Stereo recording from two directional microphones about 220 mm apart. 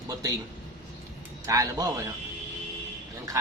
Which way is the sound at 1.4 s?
15° right (ahead or behind).